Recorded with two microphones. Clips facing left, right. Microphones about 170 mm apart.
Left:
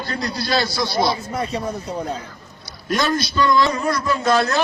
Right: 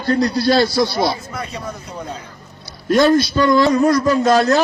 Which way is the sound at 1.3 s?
35° left (ahead or behind).